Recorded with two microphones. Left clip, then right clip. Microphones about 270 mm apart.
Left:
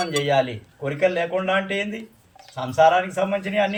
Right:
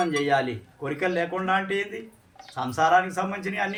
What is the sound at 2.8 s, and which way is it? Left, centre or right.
Speech, centre.